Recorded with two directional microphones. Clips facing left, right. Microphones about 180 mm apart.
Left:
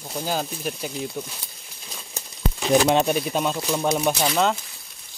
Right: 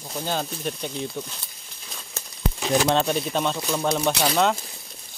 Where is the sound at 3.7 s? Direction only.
15° left (ahead or behind).